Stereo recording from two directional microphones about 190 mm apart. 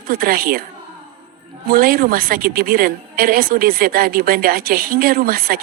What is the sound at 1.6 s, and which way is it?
A woman's voice, 50° right (ahead or behind).